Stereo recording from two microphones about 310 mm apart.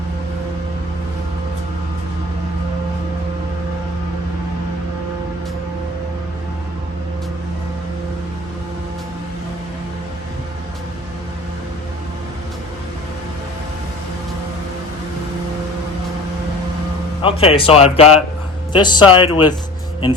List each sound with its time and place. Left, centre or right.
17.2 s speech: centre